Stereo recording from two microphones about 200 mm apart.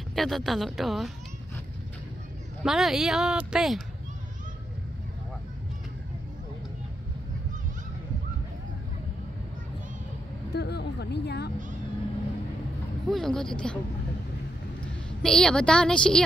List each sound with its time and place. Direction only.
0.1 s speech: centre (ahead or behind)
2.6 s speech: centre (ahead or behind)
10.5 s a sound: 55° left (ahead or behind)
13.1 s speech: centre (ahead or behind)
15.2 s speech: 5° left (ahead or behind)